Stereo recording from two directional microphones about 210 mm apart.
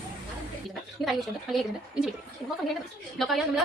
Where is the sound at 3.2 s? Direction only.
Centre (ahead or behind).